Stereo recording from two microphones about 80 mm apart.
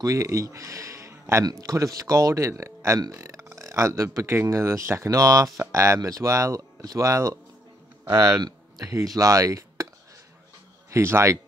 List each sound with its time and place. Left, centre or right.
0.0 s speech: right
8.4 s a sound: right
8.9 s speech: right
10.9 s speech: right